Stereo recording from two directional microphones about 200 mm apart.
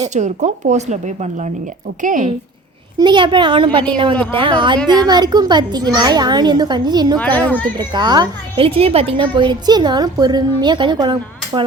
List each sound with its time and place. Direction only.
0.1 s speech: 35° right (ahead or behind)
3.0 s a woman's voice: 20° right (ahead or behind)
4.1 s a child's voice: 5° left (ahead or behind)
4.4 s a woman's voice: 25° right (ahead or behind)
7.2 s a child's voice: 5° left (ahead or behind)
7.8 s a woman's voice: 20° right (ahead or behind)